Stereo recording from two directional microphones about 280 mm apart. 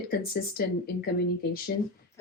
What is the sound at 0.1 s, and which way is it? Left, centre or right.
Speech, left.